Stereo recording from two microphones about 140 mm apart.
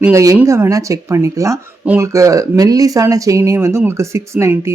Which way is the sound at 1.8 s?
10° right (ahead or behind).